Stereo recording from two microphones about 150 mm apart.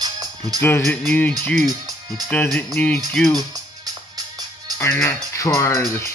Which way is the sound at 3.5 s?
25° right (ahead or behind).